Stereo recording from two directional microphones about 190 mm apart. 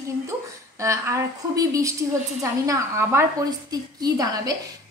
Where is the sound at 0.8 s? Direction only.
15° right (ahead or behind).